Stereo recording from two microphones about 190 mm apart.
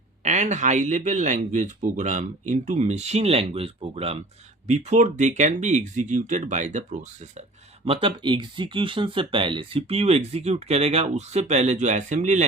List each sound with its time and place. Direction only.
0.2 s speech: 40° right (ahead or behind)
7.9 s speech: 30° right (ahead or behind)